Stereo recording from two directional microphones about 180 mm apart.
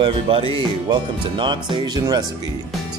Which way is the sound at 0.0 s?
30° right (ahead or behind).